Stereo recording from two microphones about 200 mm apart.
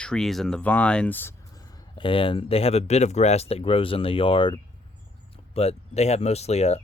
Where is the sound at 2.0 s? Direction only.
25° left (ahead or behind).